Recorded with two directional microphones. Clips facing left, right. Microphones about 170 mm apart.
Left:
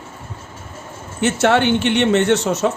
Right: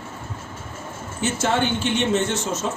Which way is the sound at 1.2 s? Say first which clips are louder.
Left 6 dB; 70° left (ahead or behind).